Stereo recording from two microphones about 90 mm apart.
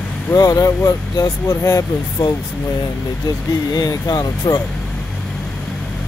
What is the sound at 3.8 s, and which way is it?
Speech, 40° left (ahead or behind).